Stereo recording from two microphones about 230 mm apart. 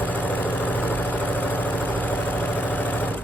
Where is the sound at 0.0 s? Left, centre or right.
Centre.